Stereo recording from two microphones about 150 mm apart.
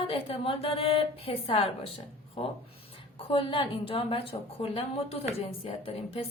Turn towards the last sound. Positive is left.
turn(degrees=40)  # may be behind; listen again after turning